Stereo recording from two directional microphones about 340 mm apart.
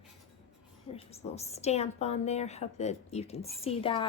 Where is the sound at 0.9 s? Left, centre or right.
Centre.